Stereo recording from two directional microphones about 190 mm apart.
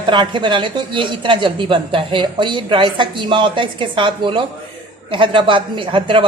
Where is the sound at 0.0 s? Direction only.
25° right (ahead or behind).